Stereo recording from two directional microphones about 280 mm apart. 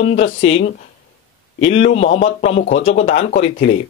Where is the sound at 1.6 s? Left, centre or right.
Left.